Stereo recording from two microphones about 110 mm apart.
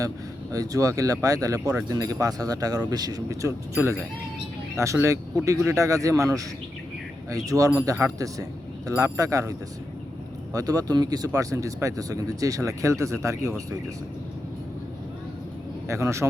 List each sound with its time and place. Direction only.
0.5 s speech: 35° right (ahead or behind)
15.9 s speech: 25° right (ahead or behind)